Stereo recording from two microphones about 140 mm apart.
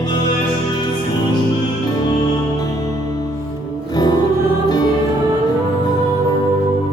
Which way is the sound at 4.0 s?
30° left (ahead or behind).